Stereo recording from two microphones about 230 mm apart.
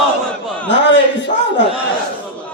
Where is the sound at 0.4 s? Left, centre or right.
Centre.